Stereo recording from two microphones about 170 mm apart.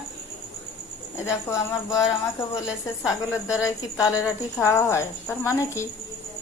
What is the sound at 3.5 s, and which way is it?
A woman's voice, 15° left (ahead or behind).